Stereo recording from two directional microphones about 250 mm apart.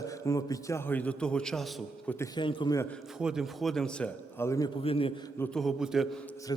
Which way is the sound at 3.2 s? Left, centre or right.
Centre.